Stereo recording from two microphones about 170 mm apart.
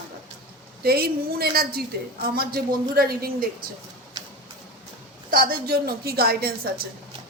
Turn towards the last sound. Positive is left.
turn(degrees=-65)  # may be behind; listen again after turning